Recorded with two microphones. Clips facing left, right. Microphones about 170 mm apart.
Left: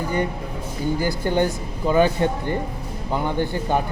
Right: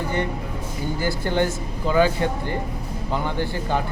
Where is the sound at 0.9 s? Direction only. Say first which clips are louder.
Left 1 dB; 15° left (ahead or behind).